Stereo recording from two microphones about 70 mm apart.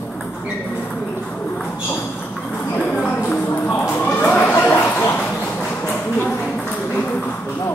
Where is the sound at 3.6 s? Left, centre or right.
Left.